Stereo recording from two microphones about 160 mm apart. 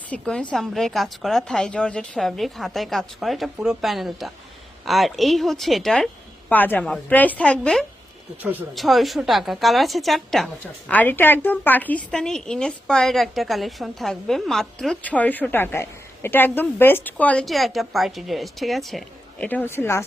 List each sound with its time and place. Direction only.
0.1 s a woman's voice: 5° left (ahead or behind)
8.4 s speech: 10° right (ahead or behind)
8.7 s a woman's voice: centre (ahead or behind)